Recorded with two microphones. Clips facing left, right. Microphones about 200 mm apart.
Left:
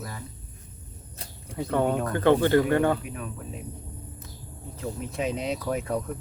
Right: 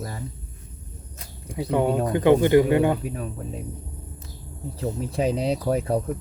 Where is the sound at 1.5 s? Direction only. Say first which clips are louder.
Right 3 dB; 15° right (ahead or behind).